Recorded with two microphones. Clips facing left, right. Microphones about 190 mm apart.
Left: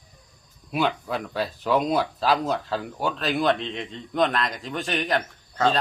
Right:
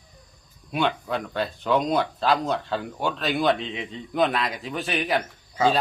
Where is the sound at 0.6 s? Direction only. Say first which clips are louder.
Even; 5° left (ahead or behind).